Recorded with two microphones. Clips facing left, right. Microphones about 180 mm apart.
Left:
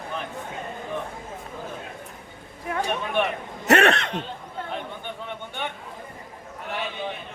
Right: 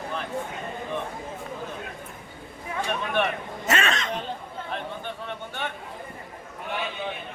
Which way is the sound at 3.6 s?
65° left (ahead or behind).